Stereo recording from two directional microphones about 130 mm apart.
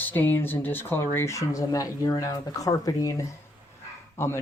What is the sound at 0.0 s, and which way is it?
Speech, 15° left (ahead or behind).